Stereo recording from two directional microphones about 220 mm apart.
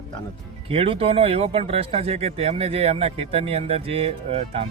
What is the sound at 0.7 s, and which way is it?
Speech, 25° right (ahead or behind).